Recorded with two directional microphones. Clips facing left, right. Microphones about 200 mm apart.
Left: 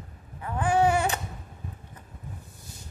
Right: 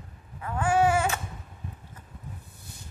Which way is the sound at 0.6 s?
20° left (ahead or behind).